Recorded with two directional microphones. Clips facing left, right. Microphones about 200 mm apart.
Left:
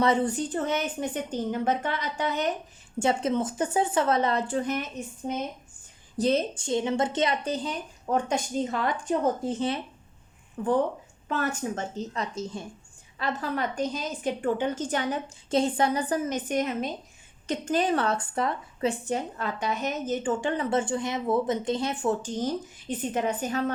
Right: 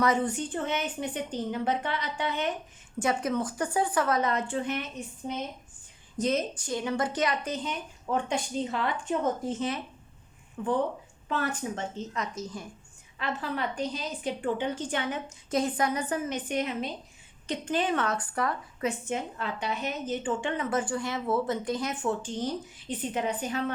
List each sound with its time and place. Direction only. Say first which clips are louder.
0.0 s a woman's voice: left 2 dB; 35° left (ahead or behind)
3.0 s speech: left 3 dB; 25° left (ahead or behind)
6.1 s a woman's voice: left 3 dB; 30° left (ahead or behind)
13.1 s a woman's voice: left 3 dB; 40° left (ahead or behind)
15.4 s a woman's voice: left 3 dB; 30° left (ahead or behind)